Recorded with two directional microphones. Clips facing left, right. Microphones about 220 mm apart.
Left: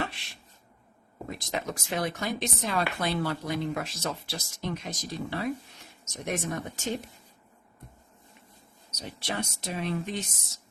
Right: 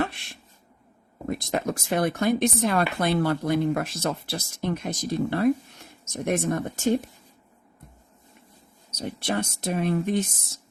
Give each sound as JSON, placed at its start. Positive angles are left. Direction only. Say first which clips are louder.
{"t": 0.0, "sound": "a sound", "louder": "right 6 dB", "side_deg": -55}
{"t": 1.3, "sound": "speech", "louder": "right 7 dB", "side_deg": -55}
{"t": 9.0, "sound": "speech", "louder": "right 6 dB", "side_deg": -50}